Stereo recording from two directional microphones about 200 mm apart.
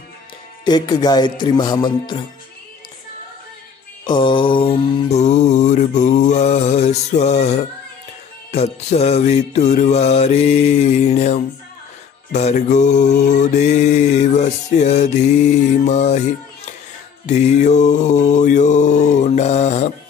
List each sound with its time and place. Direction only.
0.7 s music: 20° left (ahead or behind)
4.0 s mantra: 25° left (ahead or behind)
17.3 s mantra: 35° left (ahead or behind)